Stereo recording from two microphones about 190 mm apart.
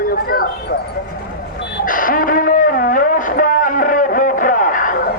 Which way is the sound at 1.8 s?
45° left (ahead or behind).